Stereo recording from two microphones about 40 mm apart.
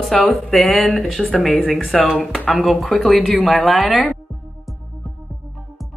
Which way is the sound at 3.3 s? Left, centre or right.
Left.